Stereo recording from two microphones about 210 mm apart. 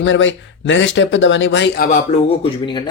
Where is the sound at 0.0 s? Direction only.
60° left (ahead or behind).